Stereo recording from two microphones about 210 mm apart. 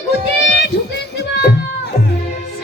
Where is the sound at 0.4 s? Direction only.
55° left (ahead or behind).